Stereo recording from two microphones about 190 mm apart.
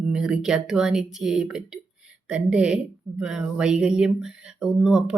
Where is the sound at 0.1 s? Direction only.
5° right (ahead or behind).